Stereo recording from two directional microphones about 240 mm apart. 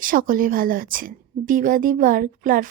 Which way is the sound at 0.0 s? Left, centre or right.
Right.